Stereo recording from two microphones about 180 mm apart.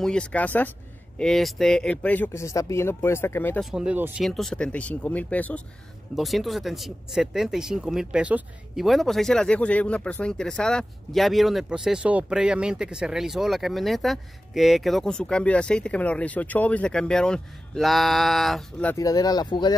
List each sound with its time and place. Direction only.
0.0 s speech: 5° left (ahead or behind)
3.7 s speech: 5° right (ahead or behind)
18.9 s speech: 20° left (ahead or behind)